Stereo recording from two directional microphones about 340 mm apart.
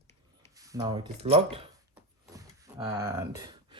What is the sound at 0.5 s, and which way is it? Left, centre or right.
Speech, centre.